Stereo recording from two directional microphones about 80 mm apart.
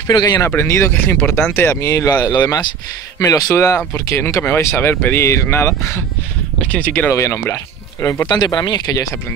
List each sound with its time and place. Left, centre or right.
0.1 s speech: left
0.6 s speech: left
6.6 s speech: centre
7.1 s speech: left
8.3 s speech: left